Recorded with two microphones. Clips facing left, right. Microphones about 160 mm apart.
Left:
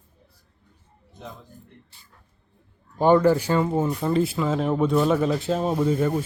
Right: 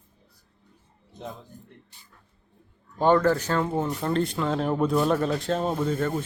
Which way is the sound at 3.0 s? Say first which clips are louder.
Left 3 dB; 10° left (ahead or behind).